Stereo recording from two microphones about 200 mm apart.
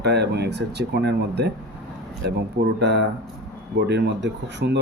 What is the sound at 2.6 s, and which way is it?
Speech, 55° right (ahead or behind).